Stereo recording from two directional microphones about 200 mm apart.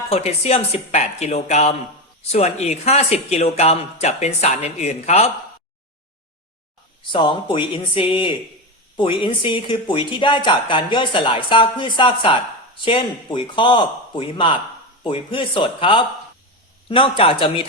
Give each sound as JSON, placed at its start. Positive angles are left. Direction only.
{"t": 0.1, "sound": "speech", "side_deg": 30}
{"t": 7.1, "sound": "speech", "side_deg": 25}